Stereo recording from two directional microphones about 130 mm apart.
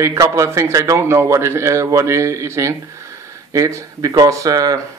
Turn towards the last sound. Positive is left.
turn(degrees=-25)  # may be behind; listen again after turning